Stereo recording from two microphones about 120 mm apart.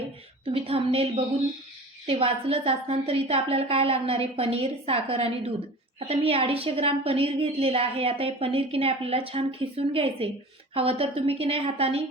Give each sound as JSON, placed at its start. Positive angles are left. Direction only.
{"t": 0.4, "sound": "a woman's voice", "side_deg": -50}